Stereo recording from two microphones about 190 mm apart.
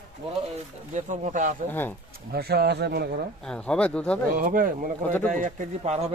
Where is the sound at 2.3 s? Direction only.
55° right (ahead or behind).